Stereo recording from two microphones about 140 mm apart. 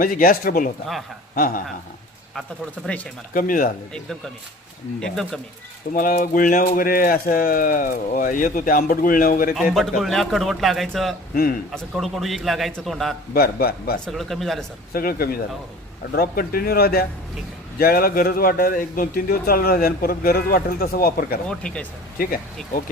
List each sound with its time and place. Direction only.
0.0 s a man's voice: 90° left
2.8 s speech: 10° left (ahead or behind)
3.3 s speech: 80° left
4.9 s a man's voice: 5° left (ahead or behind)
5.9 s speech: 80° left
6.7 s speech: 90° left
10.0 s a man's voice: centre (ahead or behind)
13.3 s a man's voice: 90° left
14.1 s a man's voice: centre (ahead or behind)
14.9 s a man's voice: 90° left
21.6 s speech: 5° left (ahead or behind)